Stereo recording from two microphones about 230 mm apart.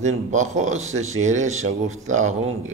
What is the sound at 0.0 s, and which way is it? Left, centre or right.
A man's voice, right.